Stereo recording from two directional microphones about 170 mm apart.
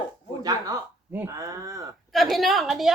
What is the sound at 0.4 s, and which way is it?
Speech, 20° right (ahead or behind).